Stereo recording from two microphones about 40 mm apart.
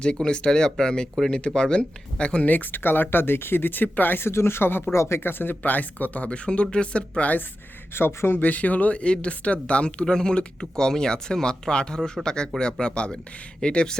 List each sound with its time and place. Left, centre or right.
0.0 s speech: left
2.5 s speech: left
4.2 s speech: left
7.9 s speech: left
8.4 s speech: left; by 14.0 s centre